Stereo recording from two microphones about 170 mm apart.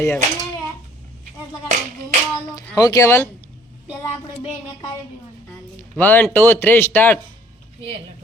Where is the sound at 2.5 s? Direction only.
20° left (ahead or behind).